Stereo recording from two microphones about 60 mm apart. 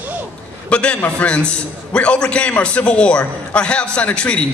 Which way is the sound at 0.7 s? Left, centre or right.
Centre.